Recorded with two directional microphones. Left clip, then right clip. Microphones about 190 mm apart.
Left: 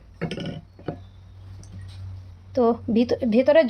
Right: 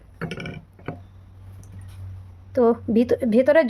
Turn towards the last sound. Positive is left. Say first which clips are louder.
# even
turn(degrees=-15)  # may be behind; listen again after turning